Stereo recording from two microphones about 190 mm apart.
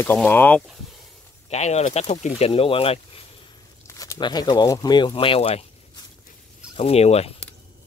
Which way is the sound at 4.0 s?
20° left (ahead or behind).